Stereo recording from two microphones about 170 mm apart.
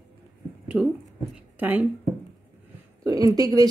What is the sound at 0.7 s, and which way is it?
A woman's voice, 5° right (ahead or behind).